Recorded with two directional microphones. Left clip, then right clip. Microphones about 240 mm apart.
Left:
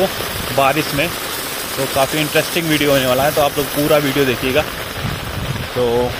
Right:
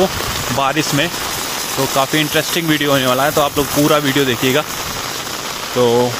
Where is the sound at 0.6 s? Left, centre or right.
Right.